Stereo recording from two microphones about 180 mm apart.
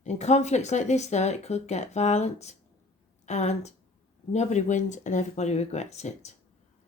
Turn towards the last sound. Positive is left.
turn(degrees=40)  # may be behind; listen again after turning